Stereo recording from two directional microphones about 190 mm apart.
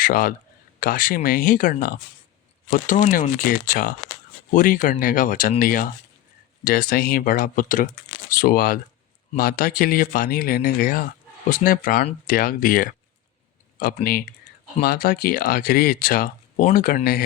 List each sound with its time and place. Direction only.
0.0 s speech: 50° left (ahead or behind)